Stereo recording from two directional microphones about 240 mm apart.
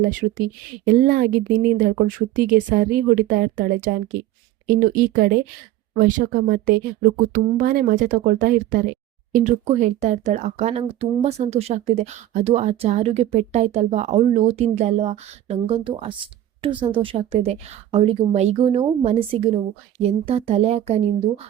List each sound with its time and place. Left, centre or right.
0.1 s speech: right